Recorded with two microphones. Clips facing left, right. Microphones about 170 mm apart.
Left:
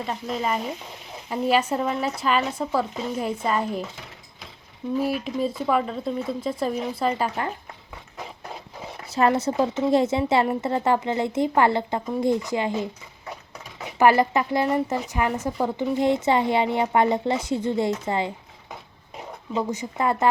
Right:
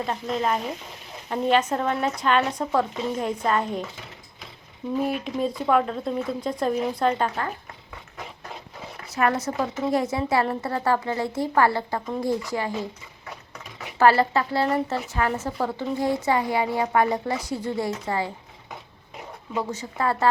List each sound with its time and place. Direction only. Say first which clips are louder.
0.0 s speech: right 2 dB; 5° left (ahead or behind)
4.9 s speech: left 1 dB; 5° left (ahead or behind)
9.0 s a woman's voice: left 3 dB; 30° left (ahead or behind)
14.0 s a woman's voice: left 1 dB; 15° left (ahead or behind)
19.5 s a woman's voice: left 2 dB; 20° left (ahead or behind)